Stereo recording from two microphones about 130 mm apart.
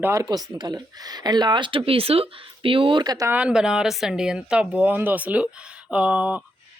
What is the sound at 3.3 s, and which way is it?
Speech, 10° right (ahead or behind).